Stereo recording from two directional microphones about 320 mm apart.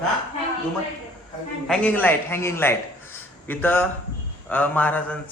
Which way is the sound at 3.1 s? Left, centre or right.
Centre.